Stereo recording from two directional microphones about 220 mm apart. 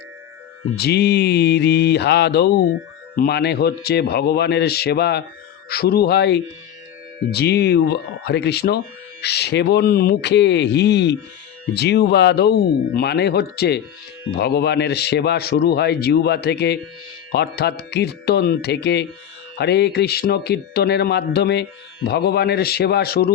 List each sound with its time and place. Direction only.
0.8 s speech: 45° left (ahead or behind)